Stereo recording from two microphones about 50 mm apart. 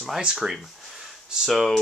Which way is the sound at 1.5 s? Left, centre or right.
Centre.